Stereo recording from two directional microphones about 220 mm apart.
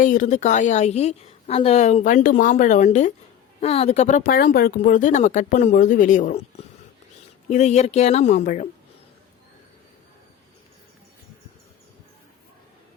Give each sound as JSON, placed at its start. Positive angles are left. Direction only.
{"t": 0.0, "sound": "a woman's voice", "side_deg": 35}